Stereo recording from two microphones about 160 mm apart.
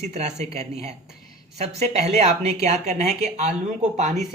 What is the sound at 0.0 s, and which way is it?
Speech, 45° right (ahead or behind).